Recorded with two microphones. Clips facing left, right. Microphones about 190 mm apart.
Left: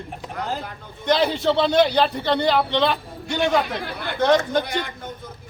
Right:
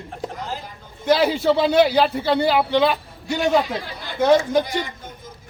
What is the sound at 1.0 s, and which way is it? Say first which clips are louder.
A man's voice: right 2 dB; 5° right (ahead or behind).